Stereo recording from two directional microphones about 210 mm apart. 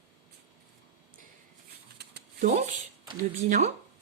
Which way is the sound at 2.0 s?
50° right (ahead or behind).